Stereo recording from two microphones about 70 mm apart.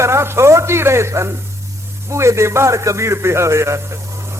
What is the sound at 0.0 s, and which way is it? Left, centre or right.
A man's voice, right.